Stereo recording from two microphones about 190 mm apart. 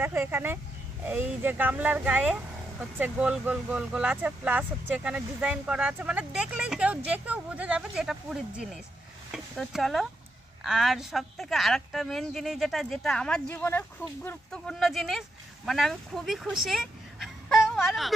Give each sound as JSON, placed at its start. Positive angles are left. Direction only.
{"t": 0.0, "sound": "a woman's voice", "side_deg": -10}